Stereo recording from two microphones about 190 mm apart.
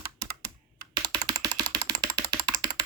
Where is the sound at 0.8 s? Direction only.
20° right (ahead or behind).